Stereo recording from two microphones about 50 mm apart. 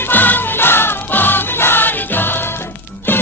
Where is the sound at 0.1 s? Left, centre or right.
Left.